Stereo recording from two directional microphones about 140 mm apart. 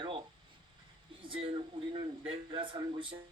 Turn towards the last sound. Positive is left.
turn(degrees=-40)  # may be behind; listen again after turning